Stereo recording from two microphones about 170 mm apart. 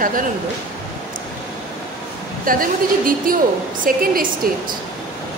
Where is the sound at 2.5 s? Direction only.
55° right (ahead or behind).